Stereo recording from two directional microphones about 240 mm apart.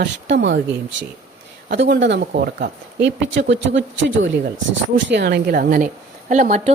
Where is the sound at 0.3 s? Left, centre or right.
Right.